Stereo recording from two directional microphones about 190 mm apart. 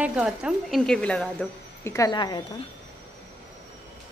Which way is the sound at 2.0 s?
20° left (ahead or behind).